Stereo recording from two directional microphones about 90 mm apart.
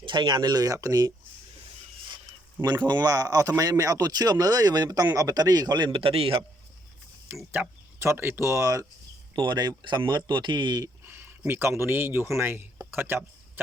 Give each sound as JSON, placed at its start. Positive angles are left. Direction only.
{"t": 0.0, "sound": "speech", "side_deg": -60}
{"t": 2.6, "sound": "speech", "side_deg": -55}
{"t": 7.5, "sound": "speech", "side_deg": -25}
{"t": 9.3, "sound": "speech", "side_deg": -55}
{"t": 11.0, "sound": "speech", "side_deg": -25}